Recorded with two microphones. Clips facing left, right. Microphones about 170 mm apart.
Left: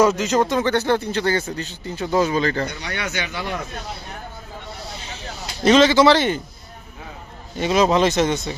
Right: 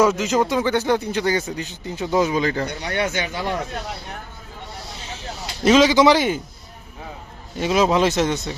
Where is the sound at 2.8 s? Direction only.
30° right (ahead or behind).